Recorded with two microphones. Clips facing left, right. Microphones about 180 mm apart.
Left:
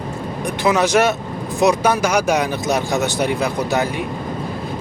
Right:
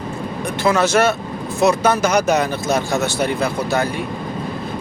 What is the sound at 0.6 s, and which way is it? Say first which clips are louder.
Speech: even; 15° left (ahead or behind).